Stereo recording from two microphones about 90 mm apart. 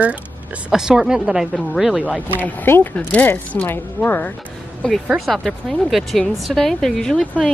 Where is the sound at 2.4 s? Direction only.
20° left (ahead or behind).